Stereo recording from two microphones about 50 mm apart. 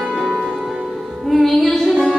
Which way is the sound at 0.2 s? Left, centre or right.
Centre.